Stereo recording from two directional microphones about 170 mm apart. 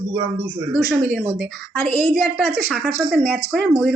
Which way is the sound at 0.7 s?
5° right (ahead or behind).